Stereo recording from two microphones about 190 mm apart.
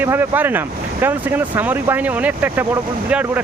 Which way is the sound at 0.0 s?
10° right (ahead or behind).